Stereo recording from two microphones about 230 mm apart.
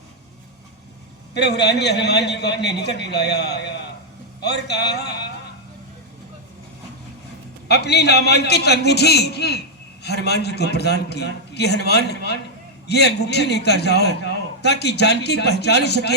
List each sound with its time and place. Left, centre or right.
1.3 s a man's voice: left
7.7 s a man's voice: left